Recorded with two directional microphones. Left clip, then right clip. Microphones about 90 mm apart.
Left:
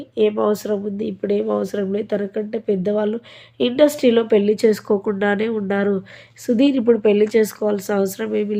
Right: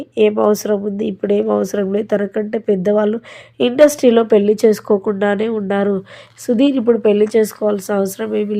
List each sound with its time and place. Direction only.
0.2 s a woman's voice: 50° right (ahead or behind); by 8.5 s 10° right (ahead or behind)